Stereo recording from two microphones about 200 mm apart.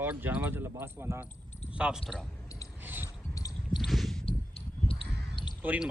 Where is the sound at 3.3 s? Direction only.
15° left (ahead or behind).